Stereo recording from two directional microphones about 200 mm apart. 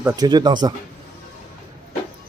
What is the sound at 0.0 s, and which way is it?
Speech, 20° right (ahead or behind).